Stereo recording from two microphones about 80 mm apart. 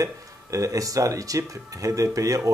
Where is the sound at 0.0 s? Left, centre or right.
Right.